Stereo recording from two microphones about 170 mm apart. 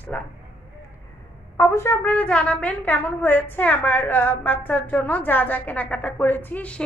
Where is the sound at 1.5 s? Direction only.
15° left (ahead or behind).